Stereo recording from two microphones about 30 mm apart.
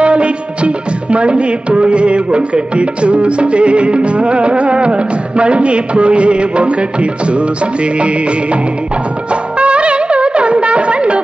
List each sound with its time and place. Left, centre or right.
0.0 s music: right